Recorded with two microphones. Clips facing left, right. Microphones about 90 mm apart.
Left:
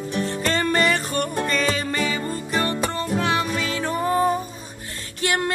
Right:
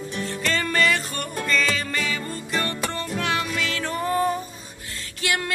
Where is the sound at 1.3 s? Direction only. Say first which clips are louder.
Right 2 dB; 25° left (ahead or behind).